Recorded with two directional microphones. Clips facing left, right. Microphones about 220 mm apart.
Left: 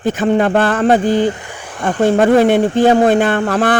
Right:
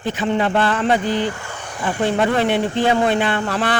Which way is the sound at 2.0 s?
45° left (ahead or behind).